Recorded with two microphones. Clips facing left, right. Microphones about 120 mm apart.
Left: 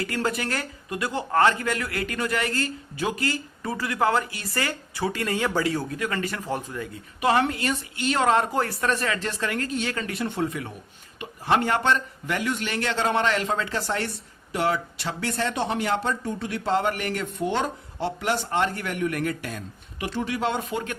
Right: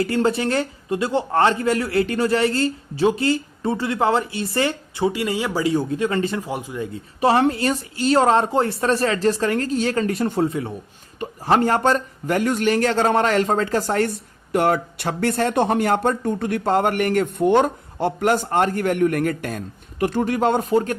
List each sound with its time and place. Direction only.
0.0 s speech: 25° right (ahead or behind)
6.4 s speech: 15° right (ahead or behind)
6.8 s speech: 30° right (ahead or behind)